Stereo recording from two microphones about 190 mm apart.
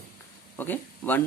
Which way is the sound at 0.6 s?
10° left (ahead or behind).